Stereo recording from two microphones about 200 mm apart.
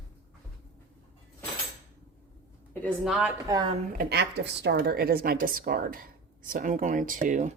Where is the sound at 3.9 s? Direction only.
55° right (ahead or behind); by 7.5 s 40° right (ahead or behind).